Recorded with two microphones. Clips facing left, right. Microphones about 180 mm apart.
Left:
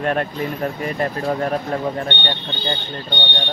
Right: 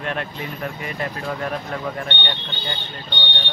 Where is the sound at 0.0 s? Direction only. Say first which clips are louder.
Left 7 dB; 45° left (ahead or behind).